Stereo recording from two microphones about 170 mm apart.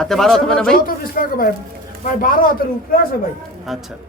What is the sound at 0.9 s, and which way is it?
Speech, 55° left (ahead or behind).